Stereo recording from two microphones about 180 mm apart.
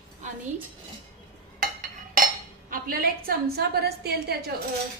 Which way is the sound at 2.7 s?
55° right (ahead or behind).